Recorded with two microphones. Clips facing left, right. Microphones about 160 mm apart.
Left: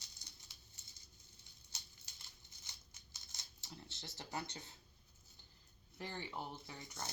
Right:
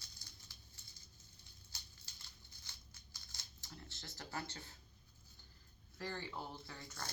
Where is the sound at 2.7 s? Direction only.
20° left (ahead or behind).